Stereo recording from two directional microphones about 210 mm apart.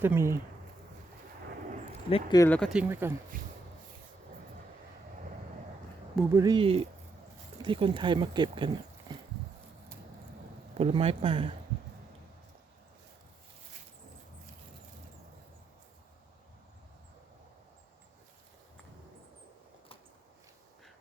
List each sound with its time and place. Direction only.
0.0 s speech: 10° right (ahead or behind)
2.0 s speech: 25° left (ahead or behind)
2.4 s speech: 5° left (ahead or behind); by 3.2 s 10° right (ahead or behind)
6.3 s speech: 20° right (ahead or behind)
10.8 s speech: 30° right (ahead or behind)